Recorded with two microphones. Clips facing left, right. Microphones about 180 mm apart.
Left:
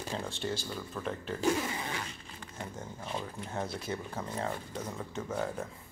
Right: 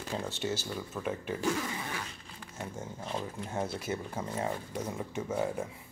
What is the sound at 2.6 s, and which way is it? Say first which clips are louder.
Speech: right 2 dB; 10° right (ahead or behind).